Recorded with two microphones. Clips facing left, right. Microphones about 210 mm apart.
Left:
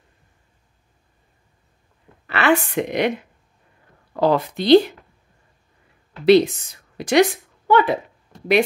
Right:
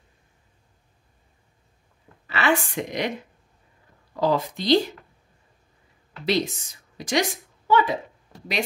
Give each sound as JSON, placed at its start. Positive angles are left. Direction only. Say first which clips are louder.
{"t": 2.2, "sound": "a woman's voice", "louder": "left 5 dB", "side_deg": 60}
{"t": 4.1, "sound": "a woman's voice", "louder": "left 4 dB", "side_deg": 60}
{"t": 6.2, "sound": "a woman's voice", "louder": "left 11 dB", "side_deg": 60}